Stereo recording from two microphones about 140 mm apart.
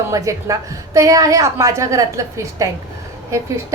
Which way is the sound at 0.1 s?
25° right (ahead or behind).